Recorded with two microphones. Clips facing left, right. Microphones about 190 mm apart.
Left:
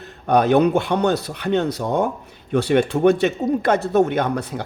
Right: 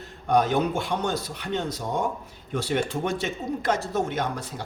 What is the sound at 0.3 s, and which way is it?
Speech, 65° left (ahead or behind).